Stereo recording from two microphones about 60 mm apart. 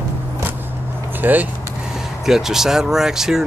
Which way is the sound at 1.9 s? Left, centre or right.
Centre.